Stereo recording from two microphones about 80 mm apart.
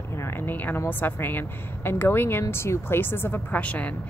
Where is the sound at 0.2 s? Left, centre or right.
Left.